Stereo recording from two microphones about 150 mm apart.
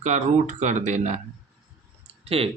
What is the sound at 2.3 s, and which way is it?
Speech, 40° right (ahead or behind).